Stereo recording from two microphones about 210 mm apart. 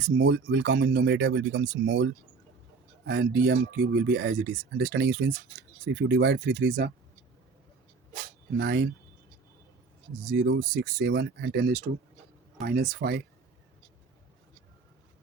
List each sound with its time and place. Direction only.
0.2 s speech: 55° right (ahead or behind)
3.1 s speech: 50° right (ahead or behind)
8.5 s speech: 50° right (ahead or behind)
10.2 s speech: 50° right (ahead or behind)